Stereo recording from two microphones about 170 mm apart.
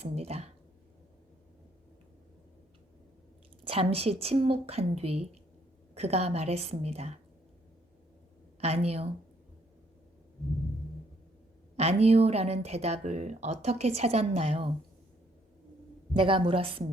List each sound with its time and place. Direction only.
0.0 s speech: 35° right (ahead or behind)
3.6 s speech: 35° right (ahead or behind)
8.6 s speech: 35° right (ahead or behind)
11.8 s speech: 35° right (ahead or behind)
16.1 s speech: 30° right (ahead or behind)